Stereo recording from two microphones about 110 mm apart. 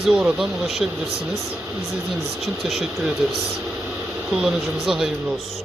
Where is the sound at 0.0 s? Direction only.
5° right (ahead or behind).